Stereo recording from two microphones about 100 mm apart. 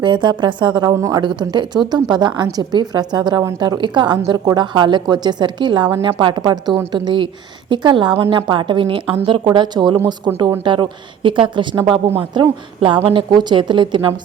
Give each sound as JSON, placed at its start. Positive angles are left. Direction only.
{"t": 0.0, "sound": "a woman's voice", "side_deg": -50}
{"t": 1.2, "sound": "a woman's voice", "side_deg": -50}
{"t": 13.3, "sound": "a woman's voice", "side_deg": -50}